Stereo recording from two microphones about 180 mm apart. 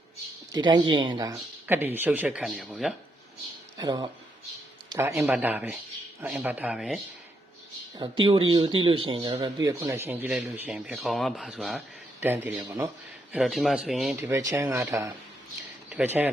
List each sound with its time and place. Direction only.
0.5 s speech: 25° right (ahead or behind); by 2.9 s 5° right (ahead or behind)
3.8 s speech: 20° right (ahead or behind); by 7.0 s 5° right (ahead or behind)
8.2 s speech: 30° right (ahead or behind); by 12.5 s 10° right (ahead or behind)
13.3 s speech: centre (ahead or behind)
14.2 s speech: 15° right (ahead or behind)